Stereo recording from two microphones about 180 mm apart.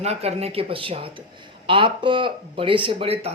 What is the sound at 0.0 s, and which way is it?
A man's voice, 35° right (ahead or behind).